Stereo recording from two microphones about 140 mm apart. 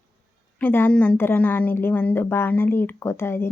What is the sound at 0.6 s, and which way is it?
Speech, 15° left (ahead or behind).